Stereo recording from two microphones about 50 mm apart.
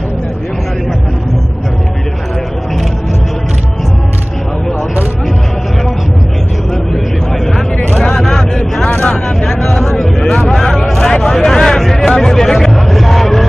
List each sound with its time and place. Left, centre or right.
8.2 s vehicle: centre
8.8 s vehicle: left
9.1 s a sound: centre